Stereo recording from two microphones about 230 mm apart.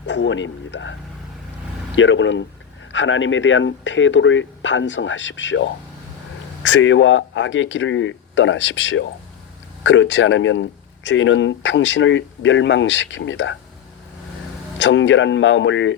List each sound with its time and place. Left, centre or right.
0.0 s speech: left
2.0 s speech: left
14.8 s speech: left